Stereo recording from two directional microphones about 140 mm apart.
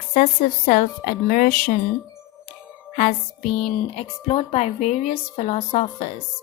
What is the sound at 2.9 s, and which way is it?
Speech, 65° left (ahead or behind).